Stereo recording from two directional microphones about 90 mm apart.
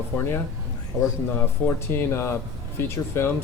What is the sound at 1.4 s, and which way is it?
A man's voice, 25° left (ahead or behind).